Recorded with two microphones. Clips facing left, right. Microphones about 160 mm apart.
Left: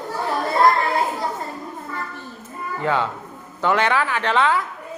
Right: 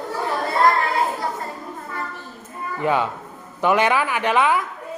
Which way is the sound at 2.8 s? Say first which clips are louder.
Right 1 dB; 15° right (ahead or behind).